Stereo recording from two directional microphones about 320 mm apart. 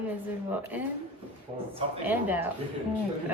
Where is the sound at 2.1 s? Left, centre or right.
Centre.